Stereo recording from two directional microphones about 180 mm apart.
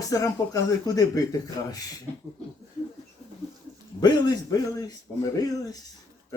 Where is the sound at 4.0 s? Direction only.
20° left (ahead or behind).